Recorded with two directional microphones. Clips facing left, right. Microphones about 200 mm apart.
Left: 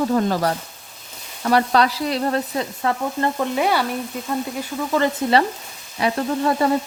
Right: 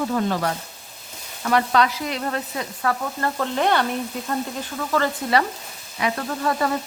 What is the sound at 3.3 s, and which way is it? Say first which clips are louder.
Frying: right 2 dB; 10° left (ahead or behind).